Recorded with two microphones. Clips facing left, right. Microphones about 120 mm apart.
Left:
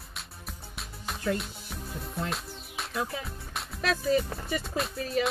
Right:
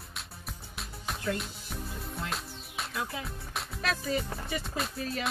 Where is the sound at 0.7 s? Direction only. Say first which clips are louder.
Even; centre (ahead or behind).